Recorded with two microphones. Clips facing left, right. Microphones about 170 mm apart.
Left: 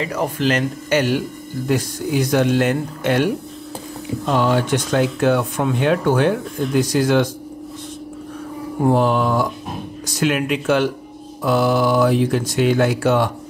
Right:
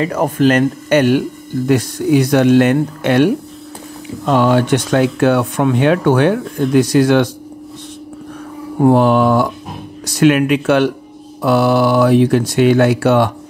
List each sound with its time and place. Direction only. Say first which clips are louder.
0.0 s speech: right 7 dB; 50° right (ahead or behind)
1.7 s speech: right 7 dB; 70° right (ahead or behind)
4.3 s speech: right 5 dB; 65° right (ahead or behind)
8.8 s speech: right 6 dB; 65° right (ahead or behind)